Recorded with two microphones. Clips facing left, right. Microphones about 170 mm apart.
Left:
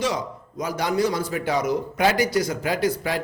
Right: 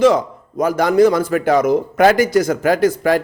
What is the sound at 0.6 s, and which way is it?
Speech, 50° right (ahead or behind).